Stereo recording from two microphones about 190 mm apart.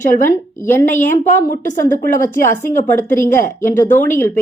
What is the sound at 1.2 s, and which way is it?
A woman's voice, 40° left (ahead or behind).